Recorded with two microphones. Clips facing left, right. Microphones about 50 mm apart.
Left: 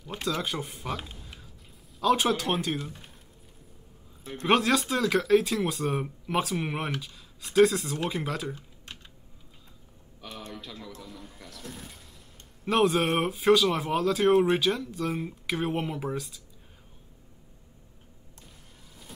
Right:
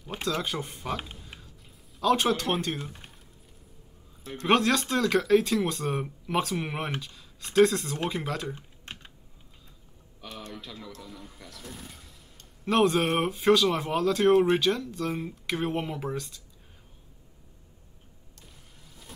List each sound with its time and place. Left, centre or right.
0.2 s speech: centre
2.0 s speech: centre
2.8 s speech: centre
4.5 s speech: centre
8.5 s typing: right
10.5 s speech: centre